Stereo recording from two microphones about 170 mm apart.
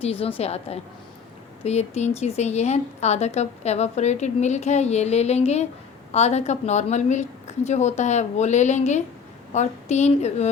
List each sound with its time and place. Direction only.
0.0 s speech: 35° left (ahead or behind)